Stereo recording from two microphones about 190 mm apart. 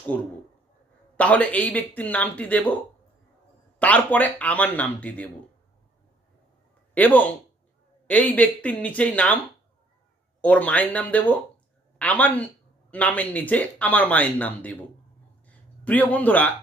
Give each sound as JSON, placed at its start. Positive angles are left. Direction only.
{"t": 0.1, "sound": "speech", "side_deg": 10}
{"t": 3.8, "sound": "speech", "side_deg": 10}
{"t": 6.9, "sound": "speech", "side_deg": 10}
{"t": 10.4, "sound": "speech", "side_deg": 5}
{"t": 15.4, "sound": "a sound", "side_deg": 10}